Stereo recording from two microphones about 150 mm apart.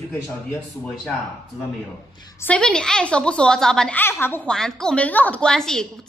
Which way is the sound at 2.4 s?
5° left (ahead or behind).